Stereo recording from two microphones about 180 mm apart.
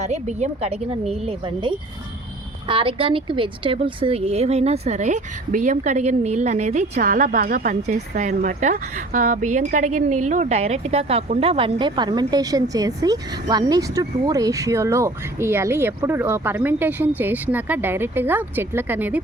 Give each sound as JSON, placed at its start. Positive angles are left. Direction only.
{"t": 0.0, "sound": "a woman's voice", "side_deg": -40}